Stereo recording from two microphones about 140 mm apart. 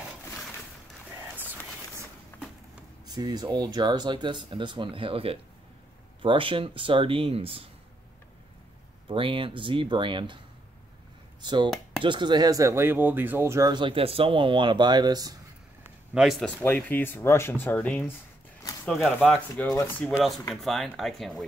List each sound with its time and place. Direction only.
1.3 s a sound: 10° right (ahead or behind)
3.1 s speech: 30° right (ahead or behind)
9.1 s speech: 40° right (ahead or behind)
11.4 s speech: 35° right (ahead or behind)
13.7 s speech: 40° right (ahead or behind)
16.2 s speech: centre (ahead or behind)
16.6 s speech: 15° left (ahead or behind)
18.9 s speech: centre (ahead or behind)